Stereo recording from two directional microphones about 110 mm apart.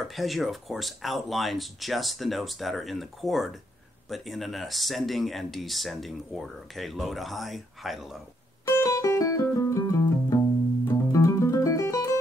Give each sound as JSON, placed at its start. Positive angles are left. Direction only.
{"t": 0.1, "sound": "speech", "side_deg": 0}
{"t": 8.6, "sound": "music", "side_deg": 30}